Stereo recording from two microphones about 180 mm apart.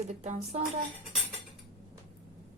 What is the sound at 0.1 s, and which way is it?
Speech, 40° right (ahead or behind).